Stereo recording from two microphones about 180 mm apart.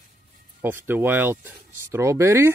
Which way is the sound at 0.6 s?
10° right (ahead or behind).